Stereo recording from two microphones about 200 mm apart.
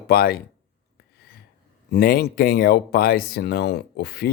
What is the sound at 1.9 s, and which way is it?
Speech, 50° left (ahead or behind).